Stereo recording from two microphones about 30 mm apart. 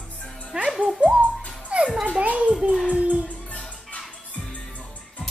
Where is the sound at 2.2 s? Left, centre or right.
Right.